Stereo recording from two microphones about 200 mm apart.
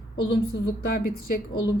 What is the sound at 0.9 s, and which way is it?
Speech, 50° left (ahead or behind).